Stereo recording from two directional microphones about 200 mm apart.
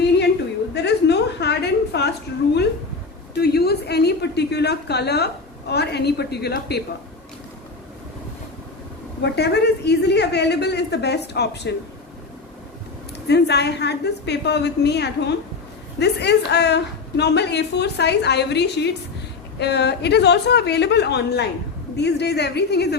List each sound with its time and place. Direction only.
0.7 s a sound: 55° left (ahead or behind)
3.3 s a woman's voice: 55° left (ahead or behind)
9.2 s a woman's voice: 55° left (ahead or behind)
13.2 s a woman's voice: 55° left (ahead or behind)